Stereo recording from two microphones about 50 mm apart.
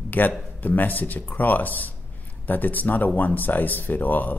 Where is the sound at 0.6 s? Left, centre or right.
Left.